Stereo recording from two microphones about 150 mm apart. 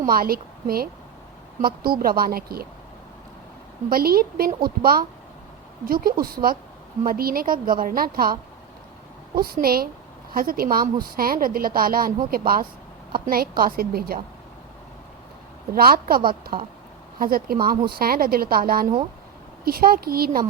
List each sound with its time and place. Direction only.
0.0 s a woman's voice: 75° right (ahead or behind)
3.8 s a woman's voice: 85° right
15.7 s a woman's voice: 85° right